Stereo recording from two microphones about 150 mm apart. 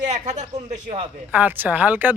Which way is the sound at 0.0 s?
50° right (ahead or behind).